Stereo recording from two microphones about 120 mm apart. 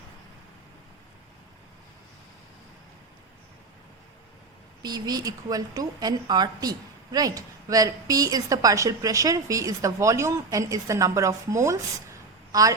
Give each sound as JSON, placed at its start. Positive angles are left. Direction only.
{"t": 4.8, "sound": "a woman's voice", "side_deg": -35}